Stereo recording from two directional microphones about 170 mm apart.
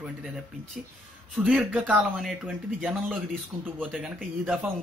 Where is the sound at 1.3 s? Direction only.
5° right (ahead or behind).